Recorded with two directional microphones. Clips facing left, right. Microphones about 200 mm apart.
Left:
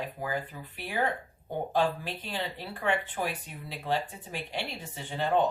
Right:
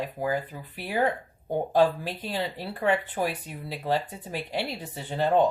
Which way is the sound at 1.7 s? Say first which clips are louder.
Right 6 dB; 40° right (ahead or behind).